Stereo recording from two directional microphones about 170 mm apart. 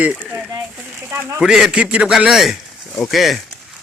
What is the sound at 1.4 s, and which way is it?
Speech, 5° right (ahead or behind).